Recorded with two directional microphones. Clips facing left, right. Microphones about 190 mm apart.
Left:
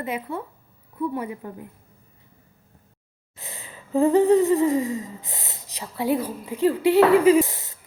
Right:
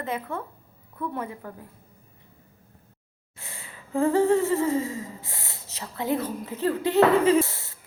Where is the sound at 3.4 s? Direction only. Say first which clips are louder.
Left 3 dB; 20° left (ahead or behind).